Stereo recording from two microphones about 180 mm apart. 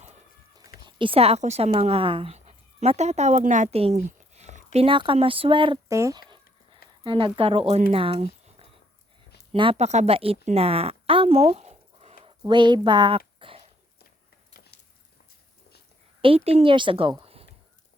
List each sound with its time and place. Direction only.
0.9 s speech: 30° right (ahead or behind)
5.9 s a woman's voice: 15° right (ahead or behind)
9.5 s speech: 30° right (ahead or behind)
12.5 s speech: 25° right (ahead or behind)
16.2 s a woman's voice: 35° right (ahead or behind)